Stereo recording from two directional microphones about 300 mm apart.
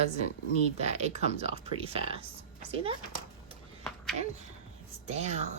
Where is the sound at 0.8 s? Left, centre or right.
Right.